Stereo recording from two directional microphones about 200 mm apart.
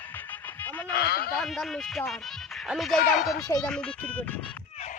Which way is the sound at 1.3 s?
Centre (ahead or behind).